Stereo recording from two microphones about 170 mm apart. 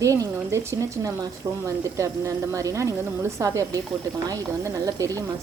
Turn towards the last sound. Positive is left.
turn(degrees=-20)  # may be behind; listen again after turning